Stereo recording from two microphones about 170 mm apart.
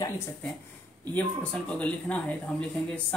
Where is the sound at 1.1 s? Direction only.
10° left (ahead or behind).